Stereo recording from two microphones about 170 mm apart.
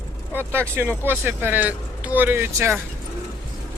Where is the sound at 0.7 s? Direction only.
15° right (ahead or behind).